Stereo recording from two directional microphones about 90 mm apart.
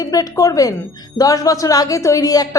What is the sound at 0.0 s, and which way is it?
A woman's voice, 45° left (ahead or behind).